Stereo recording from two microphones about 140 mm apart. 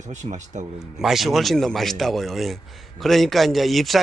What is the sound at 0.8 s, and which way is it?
A man's voice, 5° right (ahead or behind).